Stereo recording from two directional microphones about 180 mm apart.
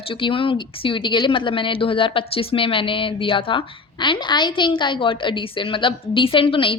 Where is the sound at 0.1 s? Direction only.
30° left (ahead or behind).